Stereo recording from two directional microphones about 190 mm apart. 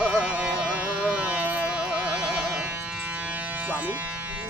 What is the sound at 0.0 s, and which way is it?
Carnatic music, 5° right (ahead or behind).